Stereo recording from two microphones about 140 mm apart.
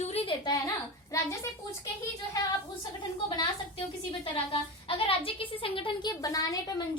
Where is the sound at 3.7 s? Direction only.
40° left (ahead or behind); by 6.7 s 25° left (ahead or behind).